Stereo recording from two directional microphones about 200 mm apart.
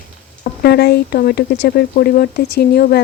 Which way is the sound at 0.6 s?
55° left (ahead or behind).